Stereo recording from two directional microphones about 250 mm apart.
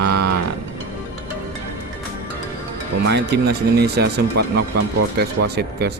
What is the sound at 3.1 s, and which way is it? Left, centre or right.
Speech, right.